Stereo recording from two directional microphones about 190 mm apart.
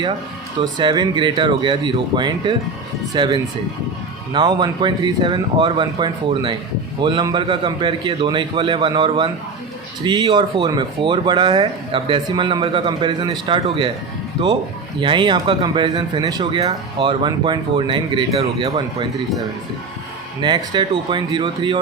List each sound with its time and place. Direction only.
0.6 s speech: 25° right (ahead or behind)
15.0 s speech: 25° right (ahead or behind)
20.4 s speech: 25° right (ahead or behind)